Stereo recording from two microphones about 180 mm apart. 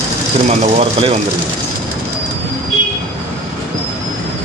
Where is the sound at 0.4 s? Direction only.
35° right (ahead or behind).